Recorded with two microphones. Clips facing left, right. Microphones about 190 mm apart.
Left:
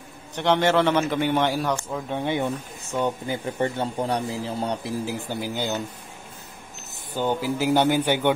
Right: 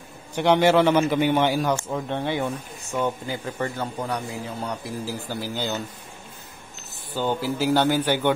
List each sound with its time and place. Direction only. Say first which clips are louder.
0.4 s a man's voice: right 2 dB; 5° right (ahead or behind)
2.0 s a man's voice: left 2 dB; 15° left (ahead or behind); by 4.9 s 30° left (ahead or behind)
5.0 s a man's voice: left 1 dB; 15° left (ahead or behind)
7.2 s a man's voice: even; 15° left (ahead or behind)